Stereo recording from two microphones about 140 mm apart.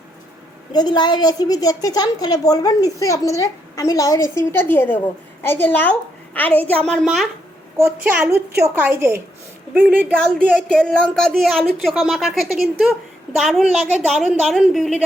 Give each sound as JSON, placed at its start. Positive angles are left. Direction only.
{"t": 0.7, "sound": "a woman's voice", "side_deg": 30}
{"t": 7.9, "sound": "a woman's voice", "side_deg": -15}
{"t": 10.2, "sound": "a woman's voice", "side_deg": 5}